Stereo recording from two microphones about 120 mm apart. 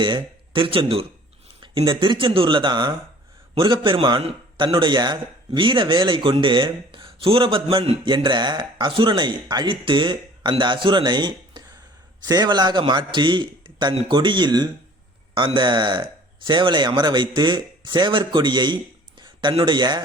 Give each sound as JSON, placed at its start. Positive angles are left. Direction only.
{"t": 0.0, "sound": "a man's voice", "side_deg": -45}
{"t": 4.2, "sound": "speech", "side_deg": -55}
{"t": 4.6, "sound": "speech", "side_deg": -40}